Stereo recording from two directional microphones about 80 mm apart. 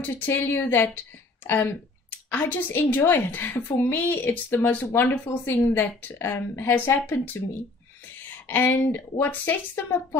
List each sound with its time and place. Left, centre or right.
0.0 s a woman's voice: centre
3.6 s a woman's voice: left
8.2 s a woman's voice: left